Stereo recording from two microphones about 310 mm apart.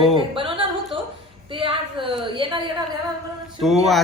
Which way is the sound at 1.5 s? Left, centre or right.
Centre.